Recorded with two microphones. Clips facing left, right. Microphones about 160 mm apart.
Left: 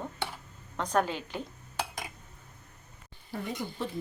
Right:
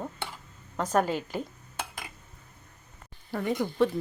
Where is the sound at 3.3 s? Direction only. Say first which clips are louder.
Right 7 dB; 75° right (ahead or behind).